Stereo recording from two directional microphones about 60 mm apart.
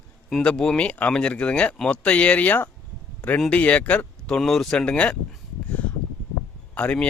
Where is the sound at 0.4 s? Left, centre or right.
Centre; by 2.6 s left.